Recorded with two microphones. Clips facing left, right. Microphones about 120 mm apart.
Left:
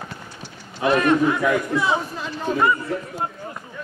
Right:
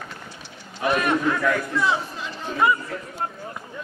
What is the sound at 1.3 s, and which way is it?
Speech, 15° left (ahead or behind).